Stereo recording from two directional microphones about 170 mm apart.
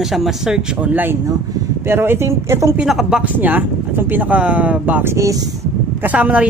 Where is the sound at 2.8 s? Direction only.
5° right (ahead or behind); by 5.6 s 20° right (ahead or behind).